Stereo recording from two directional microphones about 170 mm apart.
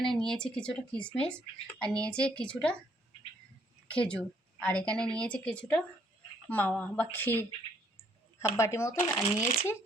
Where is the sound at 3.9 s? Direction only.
5° left (ahead or behind).